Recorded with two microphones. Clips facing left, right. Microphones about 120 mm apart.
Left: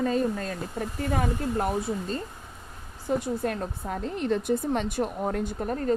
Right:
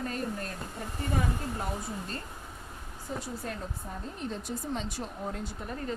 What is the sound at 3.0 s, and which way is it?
A woman's voice, 60° left (ahead or behind).